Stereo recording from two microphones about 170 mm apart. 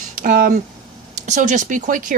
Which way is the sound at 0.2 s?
55° right (ahead or behind).